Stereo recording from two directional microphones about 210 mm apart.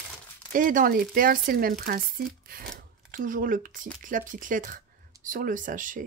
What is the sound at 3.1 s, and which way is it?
Speech, 40° right (ahead or behind).